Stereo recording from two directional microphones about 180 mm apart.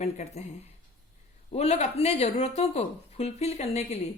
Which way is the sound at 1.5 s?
35° left (ahead or behind).